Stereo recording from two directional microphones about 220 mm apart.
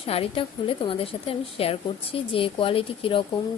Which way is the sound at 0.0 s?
25° left (ahead or behind).